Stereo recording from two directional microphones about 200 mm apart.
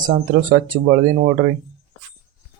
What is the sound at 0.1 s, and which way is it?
Speech, 45° right (ahead or behind).